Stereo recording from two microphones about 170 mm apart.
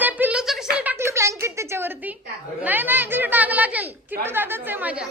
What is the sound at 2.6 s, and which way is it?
A woman's voice, 10° right (ahead or behind).